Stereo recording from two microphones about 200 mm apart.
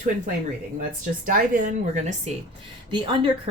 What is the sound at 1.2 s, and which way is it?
Speech, 40° right (ahead or behind).